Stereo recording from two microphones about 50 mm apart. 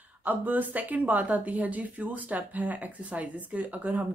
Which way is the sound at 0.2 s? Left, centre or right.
Right.